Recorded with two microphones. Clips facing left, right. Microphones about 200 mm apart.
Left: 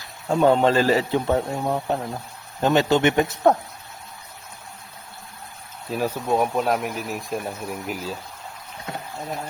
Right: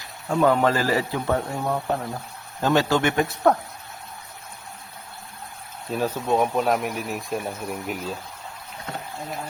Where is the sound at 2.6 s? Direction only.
20° left (ahead or behind).